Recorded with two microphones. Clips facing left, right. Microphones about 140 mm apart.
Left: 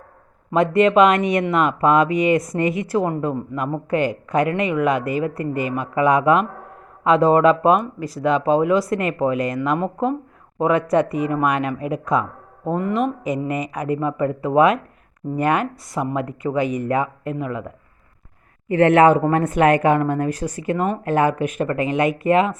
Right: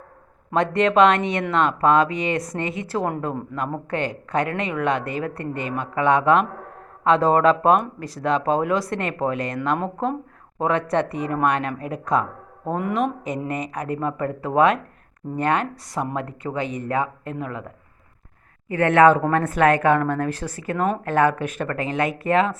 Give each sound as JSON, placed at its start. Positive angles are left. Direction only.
{"t": 0.5, "sound": "speech", "side_deg": 10}
{"t": 1.9, "sound": "a woman's voice", "side_deg": -30}
{"t": 3.0, "sound": "speech", "side_deg": 5}
{"t": 18.7, "sound": "speech", "side_deg": 20}